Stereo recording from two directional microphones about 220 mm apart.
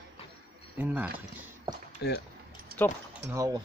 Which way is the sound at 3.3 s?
15° right (ahead or behind).